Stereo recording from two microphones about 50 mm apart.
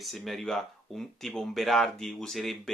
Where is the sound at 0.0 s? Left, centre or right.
Centre.